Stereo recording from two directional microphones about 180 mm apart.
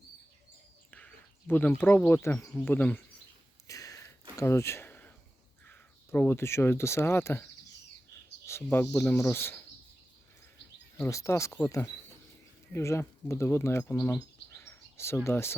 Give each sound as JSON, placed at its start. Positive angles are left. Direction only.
{"t": 0.9, "sound": "speech", "side_deg": 10}
{"t": 3.7, "sound": "a sound", "side_deg": 20}
{"t": 5.6, "sound": "speech", "side_deg": 10}
{"t": 8.4, "sound": "speech", "side_deg": 15}
{"t": 11.0, "sound": "speech", "side_deg": 15}